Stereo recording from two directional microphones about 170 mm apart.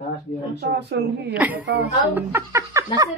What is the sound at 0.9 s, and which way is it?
Speech, 80° right.